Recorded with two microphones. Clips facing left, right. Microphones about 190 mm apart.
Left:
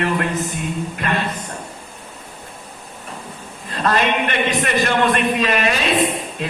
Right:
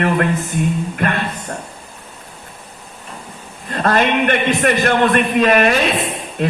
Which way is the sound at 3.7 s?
50° right (ahead or behind).